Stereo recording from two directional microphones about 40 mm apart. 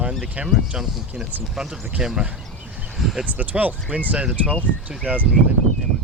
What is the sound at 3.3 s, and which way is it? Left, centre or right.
Speech, right.